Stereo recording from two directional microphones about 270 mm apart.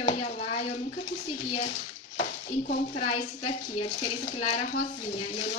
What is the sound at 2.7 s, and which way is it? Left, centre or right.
Speech, left.